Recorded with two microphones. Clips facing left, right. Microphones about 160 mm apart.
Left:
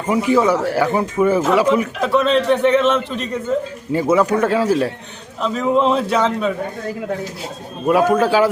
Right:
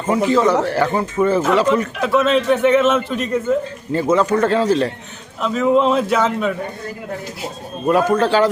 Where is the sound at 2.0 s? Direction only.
5° right (ahead or behind).